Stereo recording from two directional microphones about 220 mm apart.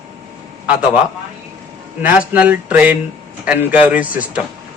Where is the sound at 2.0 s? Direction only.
5° right (ahead or behind).